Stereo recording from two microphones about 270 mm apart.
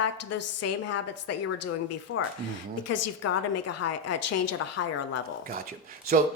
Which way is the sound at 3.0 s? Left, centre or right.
Left.